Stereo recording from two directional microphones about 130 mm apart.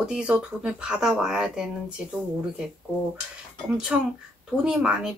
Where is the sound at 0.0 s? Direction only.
5° right (ahead or behind).